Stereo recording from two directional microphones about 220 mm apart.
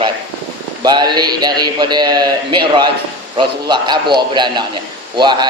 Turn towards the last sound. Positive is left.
turn(degrees=-20)  # may be behind; listen again after turning